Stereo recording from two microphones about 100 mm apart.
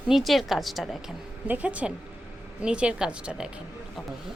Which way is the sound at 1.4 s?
15° right (ahead or behind).